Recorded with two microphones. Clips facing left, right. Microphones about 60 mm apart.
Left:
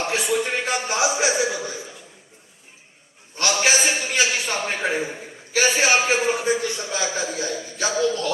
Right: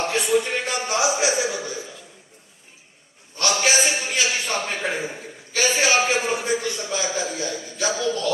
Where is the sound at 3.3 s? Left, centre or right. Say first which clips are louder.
Even; left.